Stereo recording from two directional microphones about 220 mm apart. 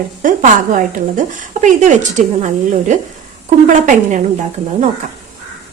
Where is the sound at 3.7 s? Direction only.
35° right (ahead or behind).